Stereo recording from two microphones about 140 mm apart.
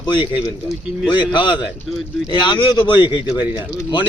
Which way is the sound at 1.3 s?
35° left (ahead or behind).